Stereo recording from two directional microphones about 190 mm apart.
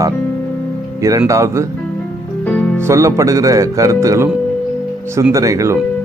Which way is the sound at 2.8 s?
15° right (ahead or behind).